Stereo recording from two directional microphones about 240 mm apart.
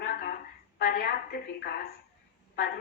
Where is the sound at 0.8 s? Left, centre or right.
Left.